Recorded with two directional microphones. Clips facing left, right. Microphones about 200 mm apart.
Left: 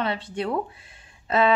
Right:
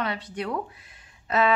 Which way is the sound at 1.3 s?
30° left (ahead or behind).